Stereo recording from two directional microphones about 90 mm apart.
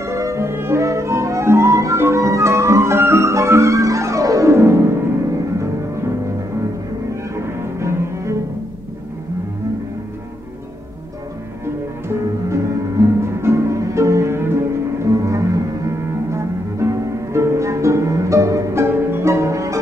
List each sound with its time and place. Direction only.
0.0 s music: 35° right (ahead or behind)
7.3 s cello: 30° right (ahead or behind)
12.1 s music: 35° right (ahead or behind)